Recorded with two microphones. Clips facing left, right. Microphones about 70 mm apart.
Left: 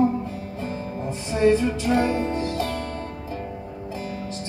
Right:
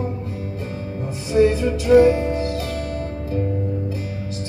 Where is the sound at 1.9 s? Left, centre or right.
Centre.